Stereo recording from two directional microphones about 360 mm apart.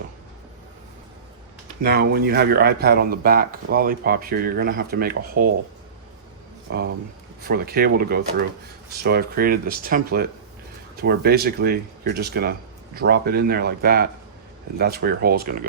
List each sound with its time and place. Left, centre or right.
1.8 s speech: right
6.7 s speech: right